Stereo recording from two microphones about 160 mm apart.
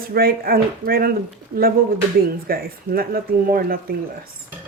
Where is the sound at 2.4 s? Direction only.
70° right (ahead or behind).